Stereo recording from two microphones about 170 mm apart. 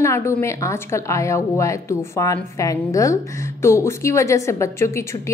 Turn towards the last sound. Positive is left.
turn(degrees=15)  # may be behind; listen again after turning